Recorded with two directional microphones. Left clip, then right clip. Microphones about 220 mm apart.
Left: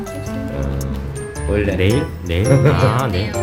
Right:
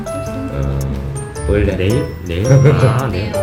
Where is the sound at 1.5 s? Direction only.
5° right (ahead or behind).